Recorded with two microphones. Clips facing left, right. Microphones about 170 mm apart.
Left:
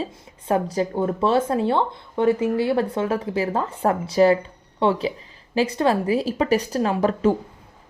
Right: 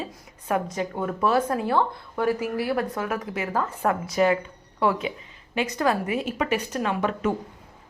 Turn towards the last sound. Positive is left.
turn(degrees=30)  # may be behind; listen again after turning